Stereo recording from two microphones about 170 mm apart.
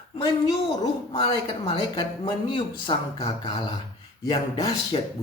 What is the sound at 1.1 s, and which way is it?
Speech, 30° left (ahead or behind).